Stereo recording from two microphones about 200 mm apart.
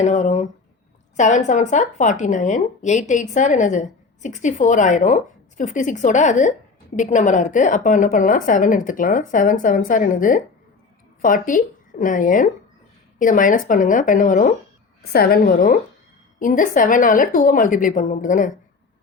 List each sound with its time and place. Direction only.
0.0 s a woman's voice: 35° left (ahead or behind)